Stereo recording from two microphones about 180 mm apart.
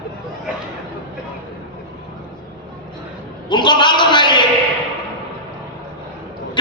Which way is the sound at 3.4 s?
25° left (ahead or behind).